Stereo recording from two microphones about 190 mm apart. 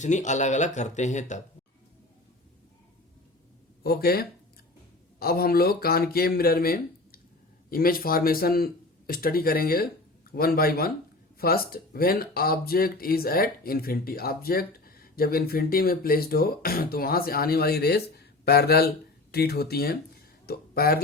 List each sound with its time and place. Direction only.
0.0 s speech: 40° left (ahead or behind)
3.8 s speech: 55° left (ahead or behind)